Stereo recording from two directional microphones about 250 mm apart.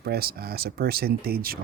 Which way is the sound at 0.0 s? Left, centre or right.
Right.